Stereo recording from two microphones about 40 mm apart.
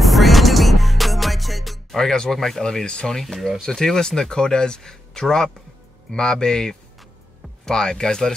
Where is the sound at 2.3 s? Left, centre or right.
Centre.